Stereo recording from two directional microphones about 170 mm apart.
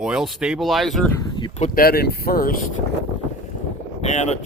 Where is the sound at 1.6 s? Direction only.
50° left (ahead or behind).